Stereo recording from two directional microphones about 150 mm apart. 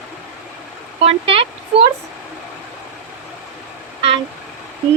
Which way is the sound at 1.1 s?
40° right (ahead or behind).